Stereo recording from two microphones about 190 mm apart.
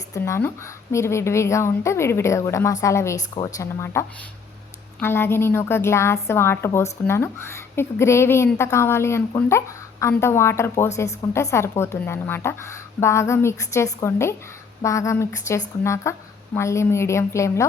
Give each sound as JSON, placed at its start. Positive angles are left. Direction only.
{"t": 0.1, "sound": "a woman's voice", "side_deg": 15}